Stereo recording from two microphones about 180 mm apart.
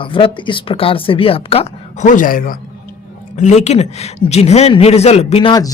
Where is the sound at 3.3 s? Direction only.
40° left (ahead or behind); by 5.7 s 25° left (ahead or behind).